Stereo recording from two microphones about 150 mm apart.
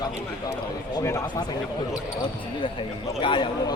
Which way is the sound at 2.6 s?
35° left (ahead or behind).